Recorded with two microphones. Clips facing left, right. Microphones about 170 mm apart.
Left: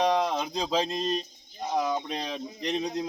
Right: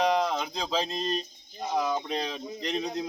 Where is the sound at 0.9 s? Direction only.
10° left (ahead or behind).